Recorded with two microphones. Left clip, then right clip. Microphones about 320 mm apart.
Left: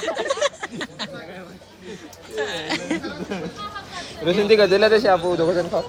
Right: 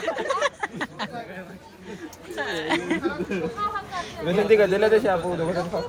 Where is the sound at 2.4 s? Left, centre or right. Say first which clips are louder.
Even; centre.